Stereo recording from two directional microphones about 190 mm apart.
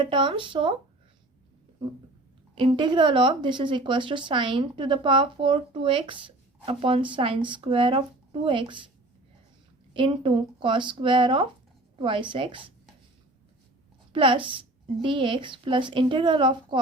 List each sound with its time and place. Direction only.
0.0 s a woman's voice: 25° right (ahead or behind)
2.6 s a woman's voice: 25° right (ahead or behind)
9.9 s a woman's voice: 25° right (ahead or behind)
14.1 s a woman's voice: 25° right (ahead or behind)